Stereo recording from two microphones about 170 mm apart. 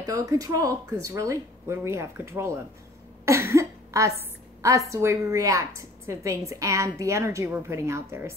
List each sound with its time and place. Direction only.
0.0 s a woman's voice: 20° right (ahead or behind)